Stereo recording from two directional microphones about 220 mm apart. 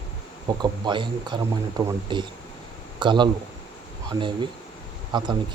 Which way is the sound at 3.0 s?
20° right (ahead or behind).